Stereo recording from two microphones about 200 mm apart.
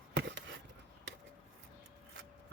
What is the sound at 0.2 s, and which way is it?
Chop, 60° right (ahead or behind).